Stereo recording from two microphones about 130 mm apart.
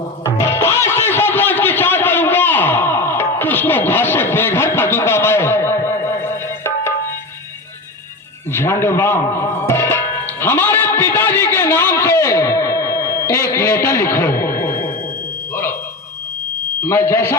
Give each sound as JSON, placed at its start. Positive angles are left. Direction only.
{"t": 0.3, "sound": "music", "side_deg": 20}
{"t": 8.5, "sound": "speech", "side_deg": 20}
{"t": 10.4, "sound": "a sound", "side_deg": 15}
{"t": 13.5, "sound": "a man's voice", "side_deg": 20}
{"t": 14.4, "sound": "a sound", "side_deg": 15}
{"t": 16.8, "sound": "a man's voice", "side_deg": 15}